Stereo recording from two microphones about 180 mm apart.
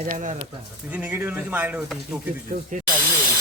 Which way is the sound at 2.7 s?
45° right (ahead or behind).